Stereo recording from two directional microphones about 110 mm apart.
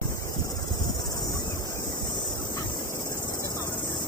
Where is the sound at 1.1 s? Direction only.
35° left (ahead or behind).